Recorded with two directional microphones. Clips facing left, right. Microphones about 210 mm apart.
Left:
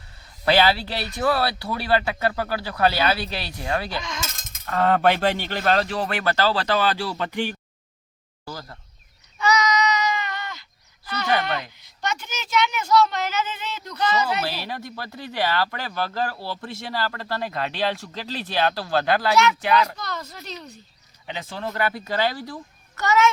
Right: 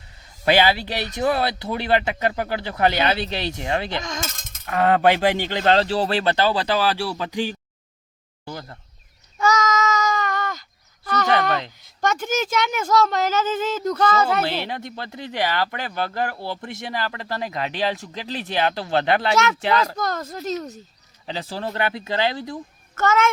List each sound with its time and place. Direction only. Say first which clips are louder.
0.4 s speech: right 1 dB; 20° right (ahead or behind)
8.4 s speech: right 2 dB; 25° right (ahead or behind)
9.4 s child singing: right 1 dB; 45° right (ahead or behind)
11.8 s speech: right 6 dB; 50° right (ahead or behind)
14.4 s speech: right 4 dB; 20° right (ahead or behind)
20.0 s speech: right 7 dB; 45° right (ahead or behind)
21.2 s speech: right 3 dB; 35° right (ahead or behind)
23.0 s speech: even; 50° right (ahead or behind)